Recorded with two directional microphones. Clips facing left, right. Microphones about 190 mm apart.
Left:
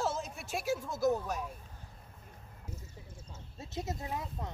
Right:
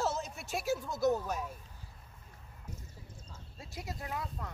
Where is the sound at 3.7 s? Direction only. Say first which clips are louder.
Left 3 dB; 20° left (ahead or behind).